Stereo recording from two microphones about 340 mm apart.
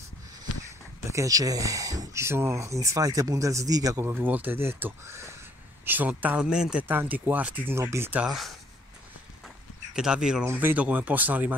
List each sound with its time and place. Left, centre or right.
0.7 s speech: centre
9.9 s speech: centre